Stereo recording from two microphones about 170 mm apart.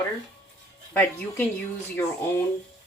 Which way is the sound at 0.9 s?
10° left (ahead or behind).